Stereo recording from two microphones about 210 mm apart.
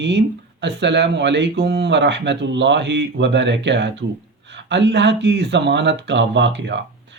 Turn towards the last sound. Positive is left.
turn(degrees=-55)  # may be behind; listen again after turning